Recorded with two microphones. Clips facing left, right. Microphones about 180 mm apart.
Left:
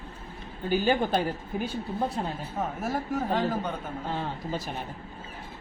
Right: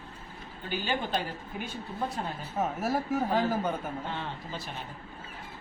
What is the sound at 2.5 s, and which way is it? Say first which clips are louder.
Speech: right 2 dB; 5° right (ahead or behind).